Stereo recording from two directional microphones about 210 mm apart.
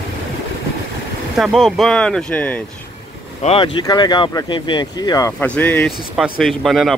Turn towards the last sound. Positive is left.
turn(degrees=0)  # may be behind; listen again after turning